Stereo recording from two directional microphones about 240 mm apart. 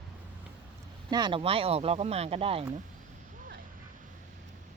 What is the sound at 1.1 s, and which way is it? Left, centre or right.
Speech, centre.